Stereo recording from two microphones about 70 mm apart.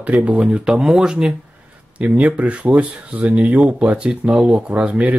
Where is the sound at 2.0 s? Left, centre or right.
Right.